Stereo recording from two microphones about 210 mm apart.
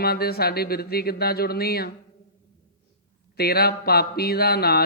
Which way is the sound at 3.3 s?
50° left (ahead or behind).